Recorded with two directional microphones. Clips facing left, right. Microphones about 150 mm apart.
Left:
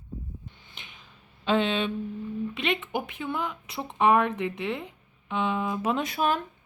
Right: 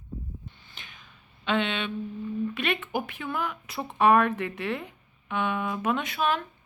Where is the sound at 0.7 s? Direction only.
20° left (ahead or behind).